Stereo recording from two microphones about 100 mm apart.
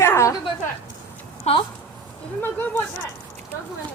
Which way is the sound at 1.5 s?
90° left.